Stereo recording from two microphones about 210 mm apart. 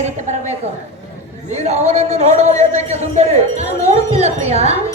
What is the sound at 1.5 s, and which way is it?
A man's voice, 35° right (ahead or behind).